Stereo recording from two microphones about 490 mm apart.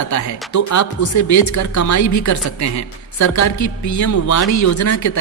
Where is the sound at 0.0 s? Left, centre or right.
Left.